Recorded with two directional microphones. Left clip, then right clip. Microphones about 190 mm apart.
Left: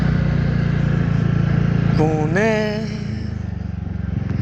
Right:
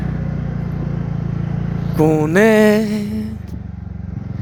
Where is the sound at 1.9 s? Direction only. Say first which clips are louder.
Right 6 dB; 60° right (ahead or behind).